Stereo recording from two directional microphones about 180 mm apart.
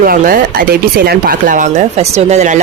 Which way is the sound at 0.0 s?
55° right (ahead or behind).